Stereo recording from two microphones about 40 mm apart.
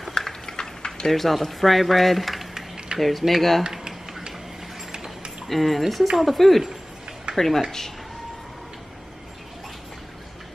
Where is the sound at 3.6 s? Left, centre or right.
Centre.